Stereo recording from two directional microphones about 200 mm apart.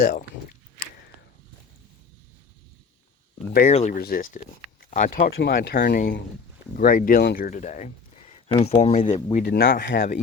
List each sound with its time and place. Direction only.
0.0 s speech: 45° left (ahead or behind)
3.5 s speech: 45° left (ahead or behind)
9.5 s speech: 50° left (ahead or behind)